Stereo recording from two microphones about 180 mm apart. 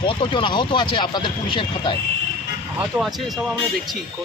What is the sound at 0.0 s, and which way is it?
Speech, 30° left (ahead or behind).